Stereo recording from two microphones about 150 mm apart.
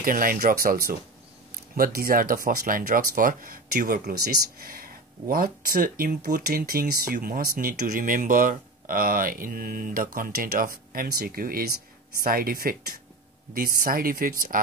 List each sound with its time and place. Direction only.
0.0 s speech: 70° right (ahead or behind)